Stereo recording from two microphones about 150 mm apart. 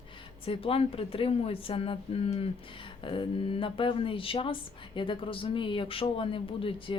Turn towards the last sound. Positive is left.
turn(degrees=35)  # may be behind; listen again after turning